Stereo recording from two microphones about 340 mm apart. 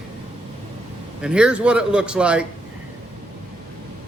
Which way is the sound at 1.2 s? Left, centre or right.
Centre.